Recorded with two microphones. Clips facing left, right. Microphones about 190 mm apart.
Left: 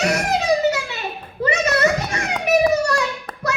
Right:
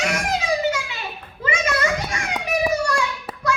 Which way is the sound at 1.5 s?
40° left (ahead or behind).